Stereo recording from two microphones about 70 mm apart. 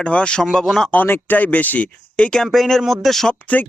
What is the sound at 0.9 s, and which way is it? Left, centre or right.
Speech, left.